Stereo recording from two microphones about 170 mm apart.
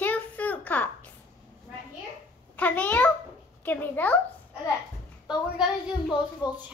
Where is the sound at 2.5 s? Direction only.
10° left (ahead or behind).